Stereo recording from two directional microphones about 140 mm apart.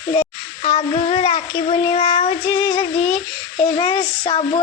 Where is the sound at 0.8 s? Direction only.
45° left (ahead or behind).